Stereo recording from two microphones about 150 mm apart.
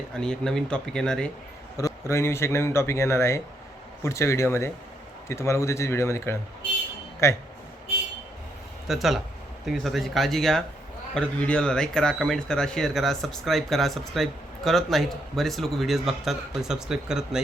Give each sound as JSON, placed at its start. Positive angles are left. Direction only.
{"t": 0.1, "sound": "speech", "side_deg": 5}
{"t": 1.7, "sound": "a man's voice", "side_deg": 20}
{"t": 8.9, "sound": "speech", "side_deg": 0}